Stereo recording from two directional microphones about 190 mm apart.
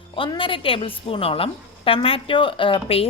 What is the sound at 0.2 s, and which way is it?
A woman's voice, 25° left (ahead or behind).